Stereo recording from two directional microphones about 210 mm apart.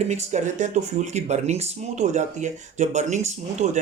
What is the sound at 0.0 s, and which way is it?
Speech, 30° right (ahead or behind).